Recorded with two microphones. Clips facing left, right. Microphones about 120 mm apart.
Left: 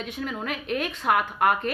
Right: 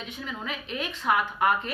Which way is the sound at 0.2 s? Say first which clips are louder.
Left 4 dB; 50° left (ahead or behind).